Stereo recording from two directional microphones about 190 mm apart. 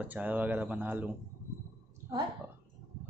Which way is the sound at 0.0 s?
10° right (ahead or behind).